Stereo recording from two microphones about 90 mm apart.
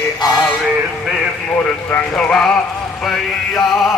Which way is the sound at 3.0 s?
5° left (ahead or behind).